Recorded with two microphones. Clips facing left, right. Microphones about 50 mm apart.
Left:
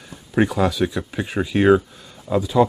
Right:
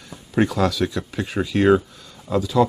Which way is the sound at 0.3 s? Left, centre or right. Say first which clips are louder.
Left 1 dB; centre.